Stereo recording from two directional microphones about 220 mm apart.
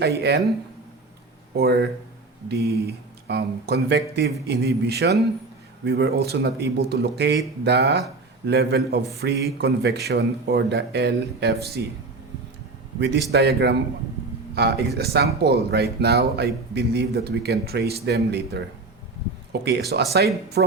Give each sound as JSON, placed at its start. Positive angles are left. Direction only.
{"t": 0.2, "sound": "speech", "side_deg": -50}
{"t": 1.5, "sound": "speech", "side_deg": -45}
{"t": 13.3, "sound": "speech", "side_deg": -50}
{"t": 19.6, "sound": "speech", "side_deg": -50}